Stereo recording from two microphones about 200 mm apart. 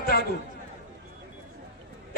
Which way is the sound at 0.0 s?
50° left (ahead or behind).